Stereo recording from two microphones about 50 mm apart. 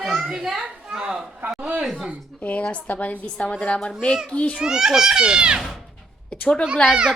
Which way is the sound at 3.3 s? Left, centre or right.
Left.